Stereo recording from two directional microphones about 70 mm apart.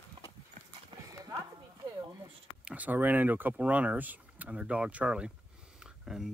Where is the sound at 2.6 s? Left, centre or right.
Centre.